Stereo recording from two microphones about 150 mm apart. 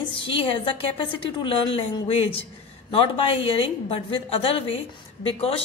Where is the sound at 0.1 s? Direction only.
35° left (ahead or behind).